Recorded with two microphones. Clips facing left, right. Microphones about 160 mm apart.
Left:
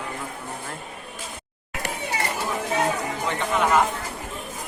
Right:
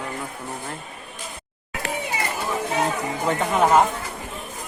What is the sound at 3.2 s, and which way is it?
Speech, 45° right (ahead or behind).